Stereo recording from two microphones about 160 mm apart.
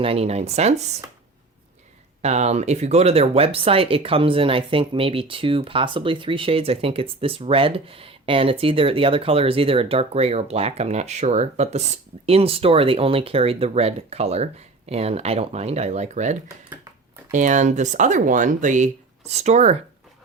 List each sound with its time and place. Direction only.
0.0 s speech: 40° right (ahead or behind)
2.2 s speech: 45° right (ahead or behind)